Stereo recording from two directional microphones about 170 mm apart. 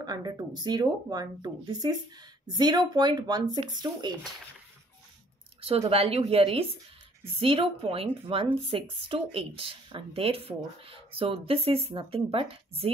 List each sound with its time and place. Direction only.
0.0 s speech: 25° right (ahead or behind)
5.6 s speech: 35° right (ahead or behind)